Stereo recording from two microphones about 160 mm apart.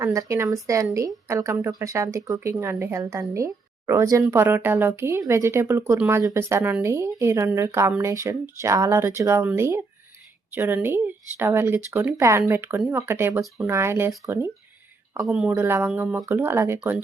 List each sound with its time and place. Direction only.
0.0 s speech: 20° right (ahead or behind)